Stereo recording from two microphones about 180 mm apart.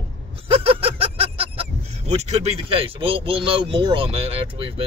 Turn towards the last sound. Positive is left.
turn(degrees=-30)  # may be behind; listen again after turning